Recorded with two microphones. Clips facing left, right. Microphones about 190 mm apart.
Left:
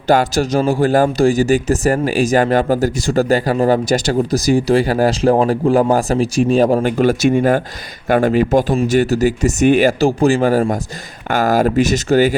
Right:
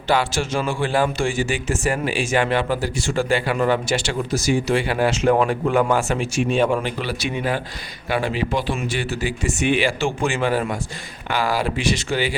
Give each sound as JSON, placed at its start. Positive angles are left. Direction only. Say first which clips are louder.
{"t": 0.1, "sound": "a man's voice", "louder": "left 7 dB", "side_deg": 40}